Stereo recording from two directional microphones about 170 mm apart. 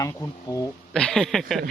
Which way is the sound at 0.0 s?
15° left (ahead or behind).